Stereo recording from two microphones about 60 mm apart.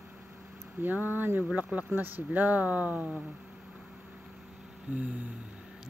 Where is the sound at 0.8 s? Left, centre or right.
Right.